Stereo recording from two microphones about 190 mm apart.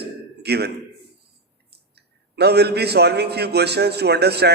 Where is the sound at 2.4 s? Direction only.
60° right (ahead or behind).